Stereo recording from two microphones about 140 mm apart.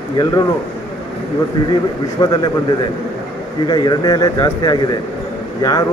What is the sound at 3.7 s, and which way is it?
A man's voice, 30° left (ahead or behind).